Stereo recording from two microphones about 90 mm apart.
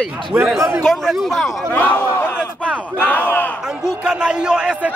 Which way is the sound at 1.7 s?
20° left (ahead or behind).